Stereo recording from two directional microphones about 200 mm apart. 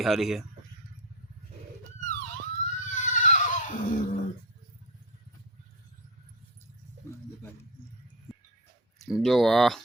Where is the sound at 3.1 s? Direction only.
35° left (ahead or behind).